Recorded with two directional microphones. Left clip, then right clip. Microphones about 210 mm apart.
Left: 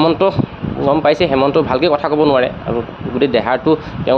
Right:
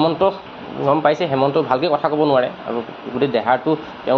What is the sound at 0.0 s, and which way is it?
Speech, 50° left (ahead or behind).